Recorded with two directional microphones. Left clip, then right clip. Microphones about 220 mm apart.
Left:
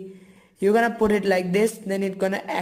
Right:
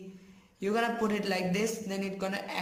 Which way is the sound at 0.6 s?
30° left (ahead or behind).